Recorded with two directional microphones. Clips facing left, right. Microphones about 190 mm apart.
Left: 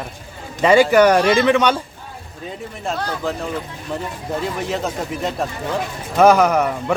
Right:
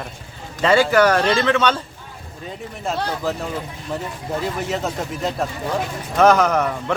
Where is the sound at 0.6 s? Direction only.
15° left (ahead or behind).